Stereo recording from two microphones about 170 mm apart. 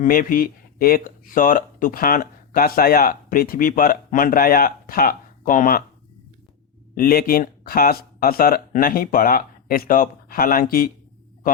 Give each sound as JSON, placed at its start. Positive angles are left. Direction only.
{"t": 0.0, "sound": "speech", "side_deg": 55}
{"t": 6.9, "sound": "speech", "side_deg": 60}